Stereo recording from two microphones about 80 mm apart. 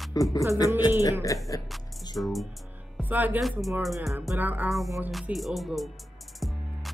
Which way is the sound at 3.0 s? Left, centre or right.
Right.